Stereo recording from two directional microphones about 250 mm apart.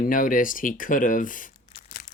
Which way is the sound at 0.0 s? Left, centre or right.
Left.